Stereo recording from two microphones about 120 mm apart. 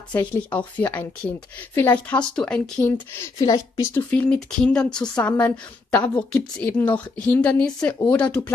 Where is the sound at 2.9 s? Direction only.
30° left (ahead or behind).